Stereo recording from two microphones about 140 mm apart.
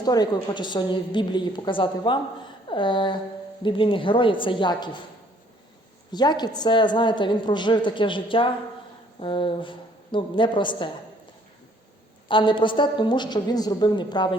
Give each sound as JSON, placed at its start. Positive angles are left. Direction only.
{"t": 0.0, "sound": "a woman's voice", "side_deg": 30}
{"t": 6.1, "sound": "a woman's voice", "side_deg": 30}
{"t": 12.3, "sound": "a woman's voice", "side_deg": 35}